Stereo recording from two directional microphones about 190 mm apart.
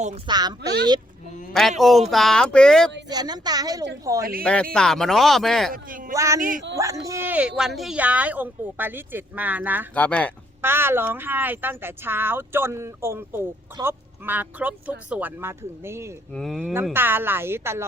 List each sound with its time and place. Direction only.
0.3 s a woman's voice: 20° right (ahead or behind)
1.8 s speech: centre (ahead or behind)
3.1 s a woman's voice: 20° right (ahead or behind)
4.2 s speech: 50° right (ahead or behind)
4.7 s speech: 5° left (ahead or behind)
5.7 s speech: 45° right (ahead or behind)
6.1 s speech: 15° right (ahead or behind)
9.9 s speech: 5° left (ahead or behind)
10.6 s speech: 10° right (ahead or behind)
16.3 s speech: 5° left (ahead or behind)
16.8 s speech: 10° right (ahead or behind)